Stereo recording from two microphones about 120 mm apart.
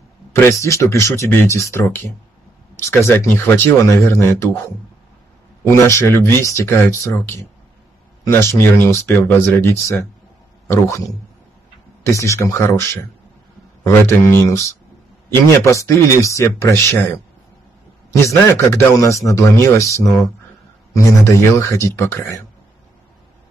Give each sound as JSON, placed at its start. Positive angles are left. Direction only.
{"t": 0.3, "sound": "speech", "side_deg": 25}
{"t": 5.6, "sound": "speech", "side_deg": 20}
{"t": 12.1, "sound": "speech", "side_deg": 25}
{"t": 18.2, "sound": "speech", "side_deg": 20}